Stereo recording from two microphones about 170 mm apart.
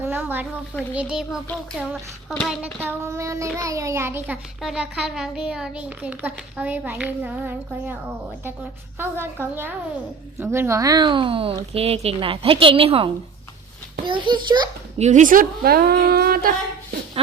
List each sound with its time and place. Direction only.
0.0 s a sound: 10° right (ahead or behind)
0.9 s a child's voice: 5° right (ahead or behind)
2.8 s a child's voice: 15° right (ahead or behind)
4.6 s a child's voice: 5° right (ahead or behind)
9.0 s a child's voice: 15° right (ahead or behind)
14.9 s a woman's voice: 45° right (ahead or behind); by 16.6 s 60° right (ahead or behind)